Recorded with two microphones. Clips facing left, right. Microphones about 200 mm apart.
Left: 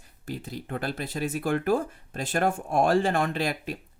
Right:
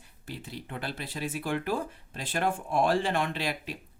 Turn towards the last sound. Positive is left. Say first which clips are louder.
# left 4 dB
turn(degrees=45)  # may be behind; listen again after turning